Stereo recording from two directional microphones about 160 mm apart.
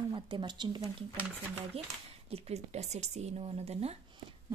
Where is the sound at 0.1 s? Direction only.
30° right (ahead or behind).